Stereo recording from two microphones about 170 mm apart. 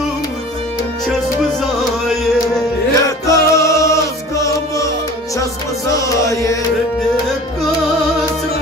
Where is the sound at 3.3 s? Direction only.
20° left (ahead or behind).